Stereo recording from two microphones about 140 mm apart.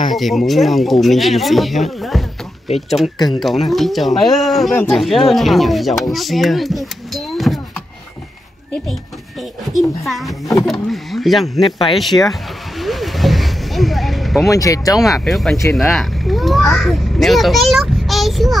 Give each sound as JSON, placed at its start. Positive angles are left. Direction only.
{"t": 0.1, "sound": "speech", "side_deg": 0}
{"t": 3.3, "sound": "speech", "side_deg": 0}
{"t": 6.1, "sound": "a sound", "side_deg": 0}
{"t": 10.0, "sound": "speech", "side_deg": 0}
{"t": 11.9, "sound": "vehicle", "side_deg": 0}
{"t": 14.5, "sound": "speech", "side_deg": 25}
{"t": 15.2, "sound": "speech", "side_deg": 0}
{"t": 15.7, "sound": "a sound", "side_deg": 0}